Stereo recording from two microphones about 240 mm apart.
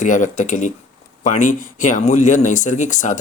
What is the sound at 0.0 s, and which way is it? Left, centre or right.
Speech, left.